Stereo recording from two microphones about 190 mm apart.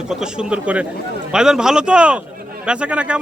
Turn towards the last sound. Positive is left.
turn(degrees=-5)  # may be behind; listen again after turning